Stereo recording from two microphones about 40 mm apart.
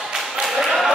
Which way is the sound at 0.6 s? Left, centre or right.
Centre.